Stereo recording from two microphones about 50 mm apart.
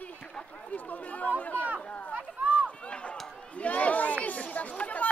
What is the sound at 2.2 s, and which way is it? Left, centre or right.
Speech, right.